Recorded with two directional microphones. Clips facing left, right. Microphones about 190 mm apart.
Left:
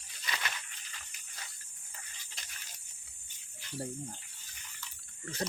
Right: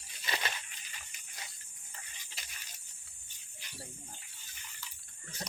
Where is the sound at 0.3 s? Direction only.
30° right (ahead or behind).